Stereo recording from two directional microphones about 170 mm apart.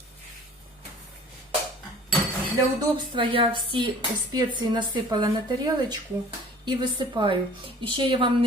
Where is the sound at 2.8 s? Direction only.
30° right (ahead or behind).